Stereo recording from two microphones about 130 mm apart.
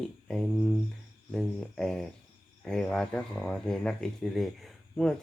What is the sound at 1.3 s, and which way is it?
Speech, 5° left (ahead or behind).